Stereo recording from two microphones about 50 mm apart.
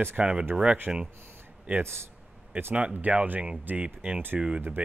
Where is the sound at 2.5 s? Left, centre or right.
Right.